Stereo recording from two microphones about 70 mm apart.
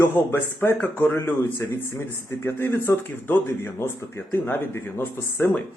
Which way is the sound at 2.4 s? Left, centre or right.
Left.